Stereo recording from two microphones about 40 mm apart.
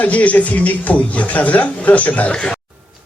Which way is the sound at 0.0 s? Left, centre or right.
Left.